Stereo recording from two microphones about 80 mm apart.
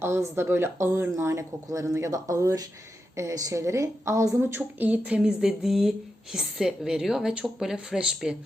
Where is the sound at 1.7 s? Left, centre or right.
Right.